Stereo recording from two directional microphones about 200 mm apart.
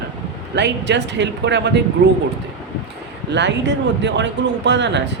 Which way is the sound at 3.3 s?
60° right (ahead or behind).